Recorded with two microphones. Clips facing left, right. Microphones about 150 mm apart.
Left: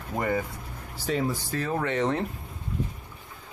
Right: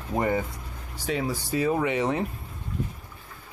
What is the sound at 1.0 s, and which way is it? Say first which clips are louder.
Speech: left 1 dB; 10° right (ahead or behind).